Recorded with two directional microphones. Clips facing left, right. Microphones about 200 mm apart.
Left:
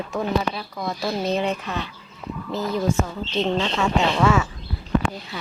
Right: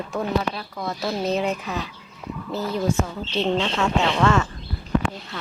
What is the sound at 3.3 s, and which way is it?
Speech, 5° right (ahead or behind).